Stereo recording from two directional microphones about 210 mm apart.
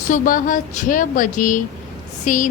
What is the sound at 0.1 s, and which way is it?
Speech, 40° left (ahead or behind).